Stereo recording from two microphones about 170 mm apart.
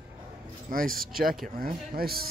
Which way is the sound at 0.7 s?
55° right (ahead or behind).